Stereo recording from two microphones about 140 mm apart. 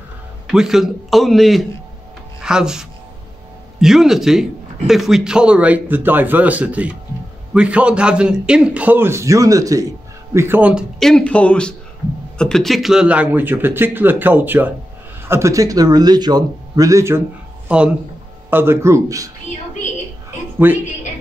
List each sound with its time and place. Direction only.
0.5 s a man's voice: 5° right (ahead or behind); by 17.2 s 20° right (ahead or behind)
17.6 s a man's voice: 10° right (ahead or behind); by 19.3 s 25° right (ahead or behind)
20.5 s speech: 15° right (ahead or behind)